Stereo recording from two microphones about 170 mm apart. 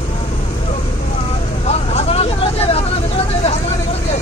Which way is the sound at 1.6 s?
40° left (ahead or behind).